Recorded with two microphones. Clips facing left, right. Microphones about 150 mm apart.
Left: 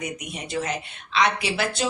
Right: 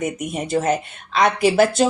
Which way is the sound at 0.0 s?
45° right (ahead or behind).